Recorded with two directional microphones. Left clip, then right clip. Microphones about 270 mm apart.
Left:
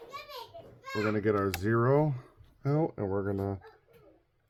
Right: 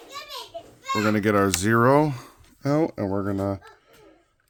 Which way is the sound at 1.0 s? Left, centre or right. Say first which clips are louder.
Right 7 dB; right.